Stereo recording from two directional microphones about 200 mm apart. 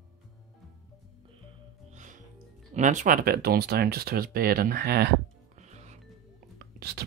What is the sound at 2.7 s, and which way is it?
Speech, 40° right (ahead or behind).